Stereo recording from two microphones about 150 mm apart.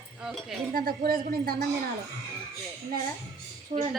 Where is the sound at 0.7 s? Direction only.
75° right (ahead or behind).